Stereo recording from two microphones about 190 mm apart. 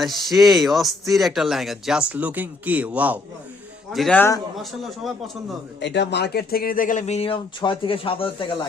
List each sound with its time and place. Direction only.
0.0 s speech: centre (ahead or behind)
3.9 s a man's voice: 5° left (ahead or behind)
5.8 s speech: 65° left (ahead or behind); by 8.4 s 30° left (ahead or behind)